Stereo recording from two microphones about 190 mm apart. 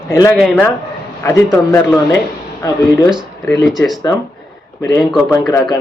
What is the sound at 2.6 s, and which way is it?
Mantra, 20° left (ahead or behind).